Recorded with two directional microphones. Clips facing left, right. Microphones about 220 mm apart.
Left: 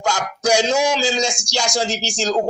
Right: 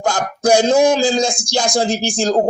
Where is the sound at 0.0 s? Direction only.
55° right (ahead or behind).